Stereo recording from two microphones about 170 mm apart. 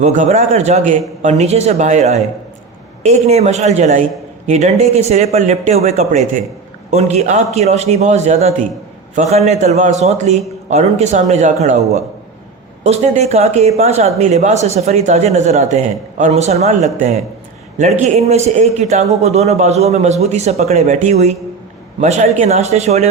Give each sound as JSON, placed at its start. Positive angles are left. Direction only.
{"t": 0.0, "sound": "speech", "side_deg": -45}
{"t": 3.2, "sound": "speech", "side_deg": -40}